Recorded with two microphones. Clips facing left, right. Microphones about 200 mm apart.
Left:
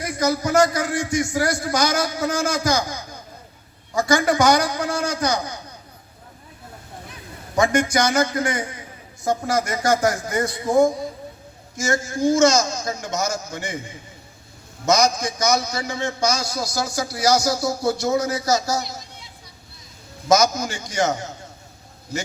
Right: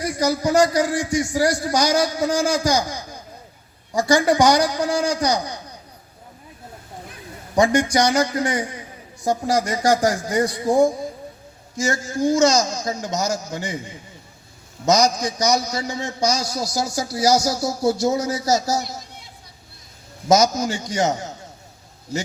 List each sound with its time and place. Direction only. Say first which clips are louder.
0.0 s a man's voice: right 1 dB; 35° right (ahead or behind)
7.6 s a man's voice: right 2 dB; 35° right (ahead or behind)
14.8 s a man's voice: right 1 dB; 40° right (ahead or behind)
20.3 s a man's voice: right 1 dB; 40° right (ahead or behind)